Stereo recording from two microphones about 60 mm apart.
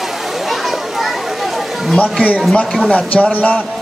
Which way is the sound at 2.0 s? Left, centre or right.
Left.